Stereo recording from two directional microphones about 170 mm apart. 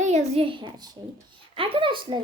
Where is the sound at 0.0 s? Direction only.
40° right (ahead or behind).